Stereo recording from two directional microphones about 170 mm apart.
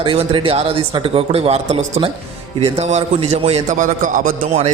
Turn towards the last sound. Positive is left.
turn(degrees=-45)  # may be behind; listen again after turning